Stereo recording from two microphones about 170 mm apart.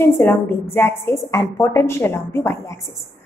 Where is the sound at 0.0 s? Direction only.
15° left (ahead or behind).